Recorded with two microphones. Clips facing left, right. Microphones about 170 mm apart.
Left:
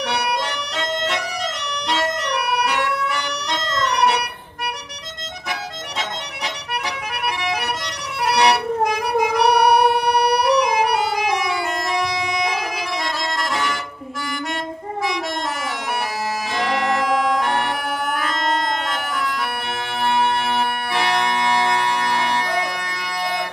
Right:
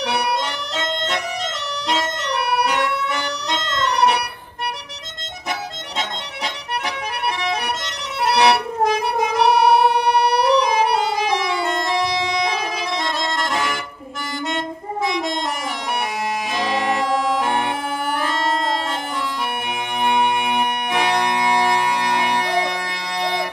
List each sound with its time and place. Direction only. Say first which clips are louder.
2.2 s music: right 1 dB; 25° right (ahead or behind)
8.3 s music: right 1 dB; 25° right (ahead or behind)
15.0 s music: right 2 dB; 20° right (ahead or behind)
16.5 s bagpipes: left 1 dB; 20° right (ahead or behind)
20.0 s music: right 1 dB; 15° right (ahead or behind)